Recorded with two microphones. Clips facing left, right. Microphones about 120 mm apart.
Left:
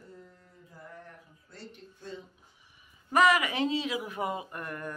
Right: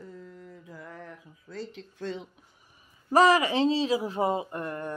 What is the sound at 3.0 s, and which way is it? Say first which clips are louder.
Speech: right 4 dB; 35° right (ahead or behind).